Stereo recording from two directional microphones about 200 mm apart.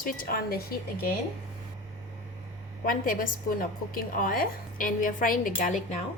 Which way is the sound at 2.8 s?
45° left (ahead or behind).